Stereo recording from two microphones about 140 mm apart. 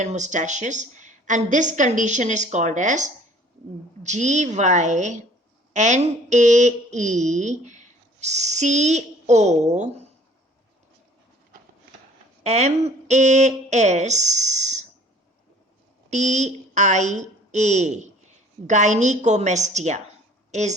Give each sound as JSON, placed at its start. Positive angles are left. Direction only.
{"t": 0.0, "sound": "speech", "side_deg": -60}
{"t": 12.4, "sound": "speech", "side_deg": -50}
{"t": 16.0, "sound": "a woman's voice", "side_deg": -55}